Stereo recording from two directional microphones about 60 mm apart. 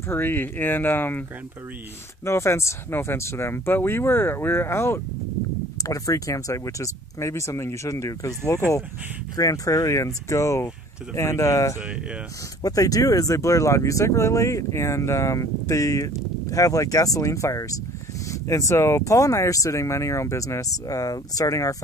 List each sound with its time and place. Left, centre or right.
0.1 s speech: left
2.2 s speech: left
5.9 s speech: left
9.4 s speech: left
12.6 s speech: left